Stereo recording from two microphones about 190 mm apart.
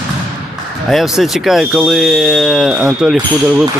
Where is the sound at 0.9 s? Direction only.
Centre (ahead or behind).